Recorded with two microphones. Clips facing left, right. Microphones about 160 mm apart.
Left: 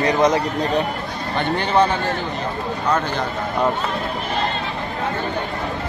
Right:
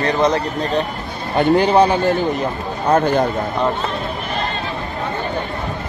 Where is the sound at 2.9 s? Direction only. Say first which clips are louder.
Right 7 dB; 45° right (ahead or behind).